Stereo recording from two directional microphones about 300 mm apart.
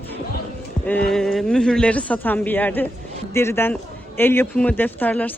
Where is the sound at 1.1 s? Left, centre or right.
Centre.